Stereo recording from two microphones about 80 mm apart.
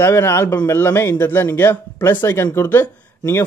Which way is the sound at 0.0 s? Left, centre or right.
Left.